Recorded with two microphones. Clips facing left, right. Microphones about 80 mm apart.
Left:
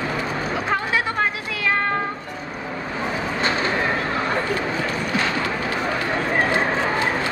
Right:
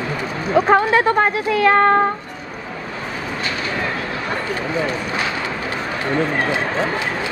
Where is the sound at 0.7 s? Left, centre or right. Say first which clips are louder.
Right 8 dB; right.